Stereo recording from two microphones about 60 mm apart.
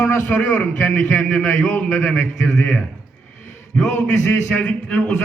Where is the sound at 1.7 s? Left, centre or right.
Left.